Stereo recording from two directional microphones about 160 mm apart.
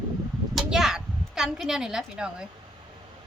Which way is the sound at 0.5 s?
5° right (ahead or behind).